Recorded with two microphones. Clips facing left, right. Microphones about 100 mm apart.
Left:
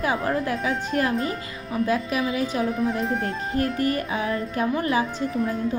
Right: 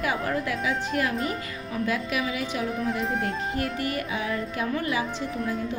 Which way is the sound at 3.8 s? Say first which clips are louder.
Left 5 dB; 40° left (ahead or behind).